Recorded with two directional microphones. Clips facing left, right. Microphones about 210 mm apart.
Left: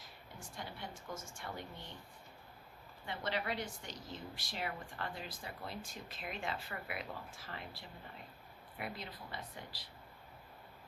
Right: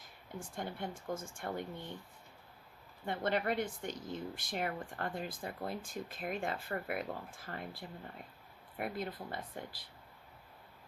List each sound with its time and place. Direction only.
0.0 s speech: 50° right (ahead or behind)
3.1 s speech: 50° right (ahead or behind)